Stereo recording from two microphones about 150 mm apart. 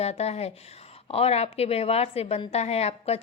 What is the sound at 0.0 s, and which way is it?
A woman's voice, 45° left (ahead or behind).